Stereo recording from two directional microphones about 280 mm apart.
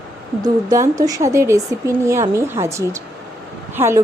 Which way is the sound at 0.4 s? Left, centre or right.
Centre.